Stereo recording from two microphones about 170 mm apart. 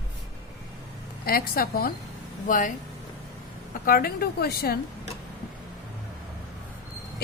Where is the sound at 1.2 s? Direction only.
60° left (ahead or behind).